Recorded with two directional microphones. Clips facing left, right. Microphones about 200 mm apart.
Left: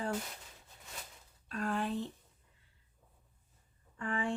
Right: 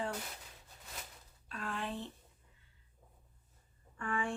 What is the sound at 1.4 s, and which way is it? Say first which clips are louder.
Speech: left 6 dB; 40° left (ahead or behind).